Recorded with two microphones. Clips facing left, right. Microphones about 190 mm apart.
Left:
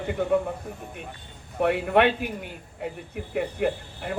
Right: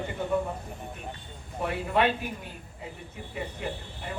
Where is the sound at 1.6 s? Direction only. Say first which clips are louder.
Left 6 dB; 65° left (ahead or behind).